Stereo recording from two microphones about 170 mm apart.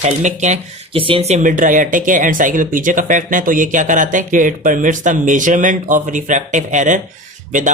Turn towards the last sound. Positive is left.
turn(degrees=-50)  # may be behind; listen again after turning